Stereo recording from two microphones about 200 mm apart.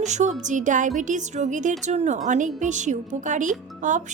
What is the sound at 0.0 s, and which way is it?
Speech, 35° right (ahead or behind).